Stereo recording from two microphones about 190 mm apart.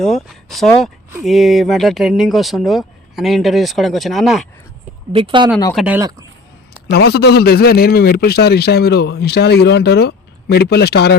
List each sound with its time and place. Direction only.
0.3 s speech: centre (ahead or behind)
5.1 s speech: 25° right (ahead or behind)
5.7 s speech: 5° right (ahead or behind)
6.0 s speech: 15° right (ahead or behind)
6.9 s a man's voice: 55° left (ahead or behind)